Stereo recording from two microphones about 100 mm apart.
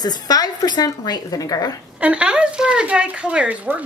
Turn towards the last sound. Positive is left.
turn(degrees=-15)  # may be behind; listen again after turning